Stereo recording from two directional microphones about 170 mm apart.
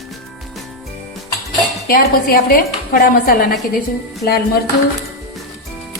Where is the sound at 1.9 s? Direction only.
60° left (ahead or behind).